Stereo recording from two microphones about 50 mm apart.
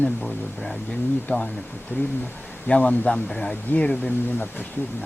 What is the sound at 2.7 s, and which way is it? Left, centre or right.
Speech, left.